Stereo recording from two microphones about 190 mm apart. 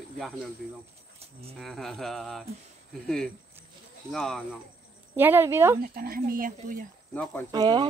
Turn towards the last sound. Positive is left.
turn(degrees=-25)  # may be behind; listen again after turning